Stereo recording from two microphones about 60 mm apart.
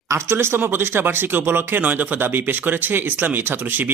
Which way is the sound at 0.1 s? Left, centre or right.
Right.